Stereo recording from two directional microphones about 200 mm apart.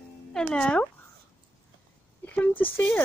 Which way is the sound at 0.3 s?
5° left (ahead or behind).